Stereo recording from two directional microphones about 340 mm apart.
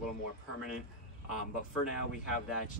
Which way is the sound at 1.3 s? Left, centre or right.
Left.